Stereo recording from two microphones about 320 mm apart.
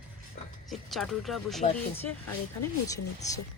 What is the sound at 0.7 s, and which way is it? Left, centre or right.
Speech, centre.